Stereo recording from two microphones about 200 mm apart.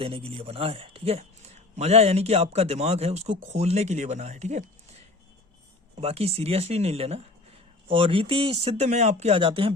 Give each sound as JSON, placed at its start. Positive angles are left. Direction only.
{"t": 0.0, "sound": "speech", "side_deg": -30}